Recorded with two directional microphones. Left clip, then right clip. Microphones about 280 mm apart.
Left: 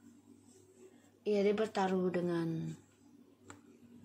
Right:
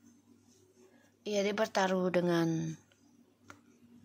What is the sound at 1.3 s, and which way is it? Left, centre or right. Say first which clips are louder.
A woman's voice: right 1 dB; right.